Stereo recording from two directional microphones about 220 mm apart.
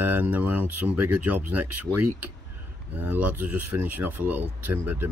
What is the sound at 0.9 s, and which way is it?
Speech, 90° right.